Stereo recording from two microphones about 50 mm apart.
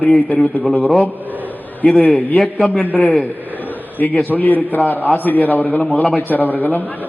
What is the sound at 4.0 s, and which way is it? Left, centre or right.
A man's voice, left.